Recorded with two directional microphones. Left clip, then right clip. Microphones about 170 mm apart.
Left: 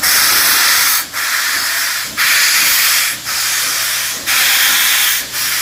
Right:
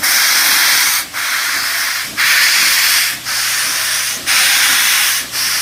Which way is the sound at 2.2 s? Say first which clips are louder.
Right 1 dB; 30° left (ahead or behind).